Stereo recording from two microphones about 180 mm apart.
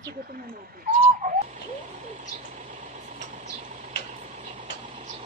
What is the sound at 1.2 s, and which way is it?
Bird, 50° right (ahead or behind).